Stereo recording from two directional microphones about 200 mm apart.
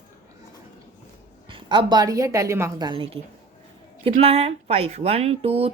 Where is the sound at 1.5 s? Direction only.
25° right (ahead or behind).